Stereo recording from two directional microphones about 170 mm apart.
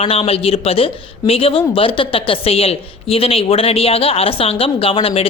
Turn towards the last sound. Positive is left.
turn(degrees=35)  # may be behind; listen again after turning